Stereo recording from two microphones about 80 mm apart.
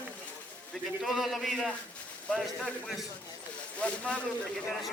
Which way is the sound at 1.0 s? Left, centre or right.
Centre.